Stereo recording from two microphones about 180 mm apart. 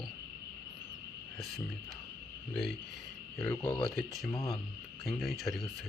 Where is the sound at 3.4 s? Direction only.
10° left (ahead or behind).